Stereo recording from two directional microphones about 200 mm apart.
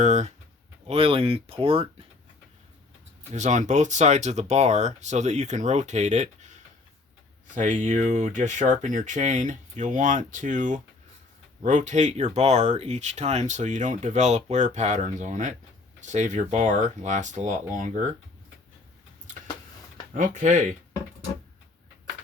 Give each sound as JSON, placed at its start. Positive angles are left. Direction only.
{"t": 0.0, "sound": "speech", "side_deg": -35}
{"t": 3.3, "sound": "speech", "side_deg": -35}
{"t": 20.1, "sound": "speech", "side_deg": -40}